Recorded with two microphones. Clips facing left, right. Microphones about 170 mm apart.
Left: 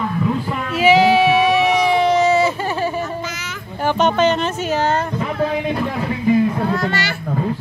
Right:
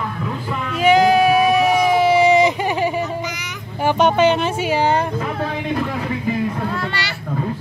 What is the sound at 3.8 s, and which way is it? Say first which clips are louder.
Speech: right 1 dB; 10° right (ahead or behind).